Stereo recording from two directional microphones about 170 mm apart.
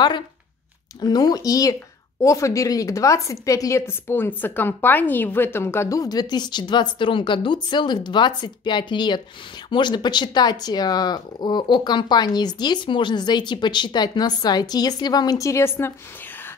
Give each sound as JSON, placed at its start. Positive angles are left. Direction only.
{"t": 1.0, "sound": "a woman's voice", "side_deg": 25}